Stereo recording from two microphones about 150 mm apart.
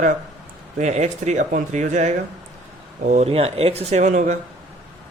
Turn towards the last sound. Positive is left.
turn(degrees=-55)  # may be behind; listen again after turning